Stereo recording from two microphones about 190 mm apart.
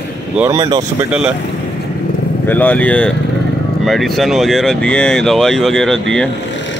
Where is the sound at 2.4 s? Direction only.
10° left (ahead or behind).